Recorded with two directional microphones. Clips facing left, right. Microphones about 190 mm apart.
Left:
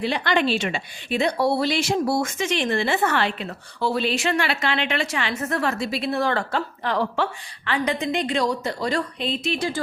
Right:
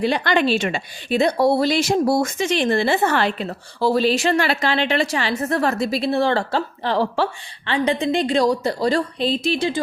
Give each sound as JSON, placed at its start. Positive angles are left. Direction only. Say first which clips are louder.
{"t": 0.0, "sound": "a woman's voice", "louder": "right 3 dB", "side_deg": -45}